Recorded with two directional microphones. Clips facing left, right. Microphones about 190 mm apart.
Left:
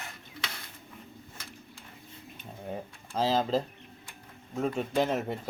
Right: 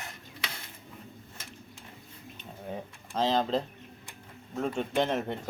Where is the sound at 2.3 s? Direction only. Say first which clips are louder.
Left 1 dB; 5° left (ahead or behind).